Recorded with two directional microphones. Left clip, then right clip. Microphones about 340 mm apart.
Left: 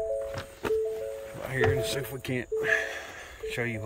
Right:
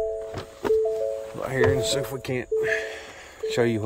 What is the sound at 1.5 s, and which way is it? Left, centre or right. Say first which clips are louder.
Speech: right 5 dB; centre.